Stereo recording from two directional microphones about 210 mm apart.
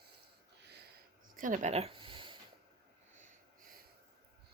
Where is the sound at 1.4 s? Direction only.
35° right (ahead or behind).